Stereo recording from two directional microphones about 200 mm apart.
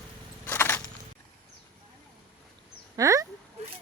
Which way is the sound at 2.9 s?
15° right (ahead or behind).